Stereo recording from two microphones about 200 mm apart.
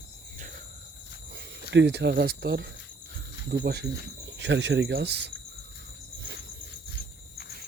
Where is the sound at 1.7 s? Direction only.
60° right (ahead or behind).